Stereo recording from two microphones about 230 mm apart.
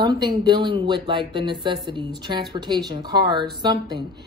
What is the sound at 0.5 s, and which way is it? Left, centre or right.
A woman's voice, right.